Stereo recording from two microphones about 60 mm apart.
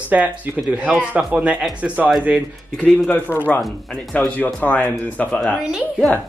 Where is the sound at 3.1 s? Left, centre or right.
Left.